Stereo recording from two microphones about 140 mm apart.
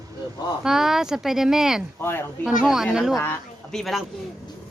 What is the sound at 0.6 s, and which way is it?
A woman's voice, 5° right (ahead or behind).